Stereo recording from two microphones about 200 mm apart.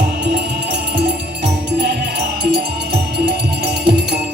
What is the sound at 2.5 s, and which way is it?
Music, 55° right (ahead or behind).